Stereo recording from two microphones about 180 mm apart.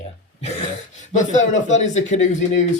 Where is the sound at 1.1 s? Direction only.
40° left (ahead or behind).